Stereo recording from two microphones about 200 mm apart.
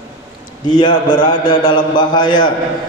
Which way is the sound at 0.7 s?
20° left (ahead or behind).